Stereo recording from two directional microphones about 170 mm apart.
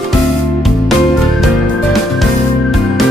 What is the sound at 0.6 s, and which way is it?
Music, centre (ahead or behind).